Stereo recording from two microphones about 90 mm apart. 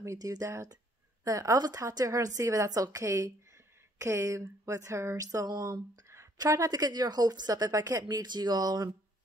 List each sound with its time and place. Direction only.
0.0 s a woman's voice: 40° right (ahead or behind)